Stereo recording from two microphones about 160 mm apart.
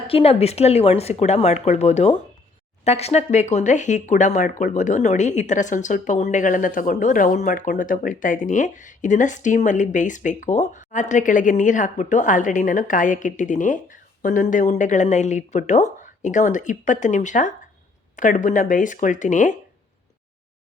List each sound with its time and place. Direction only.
0.1 s speech: 35° left (ahead or behind)